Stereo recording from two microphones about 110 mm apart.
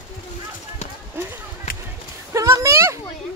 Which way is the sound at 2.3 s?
30° right (ahead or behind).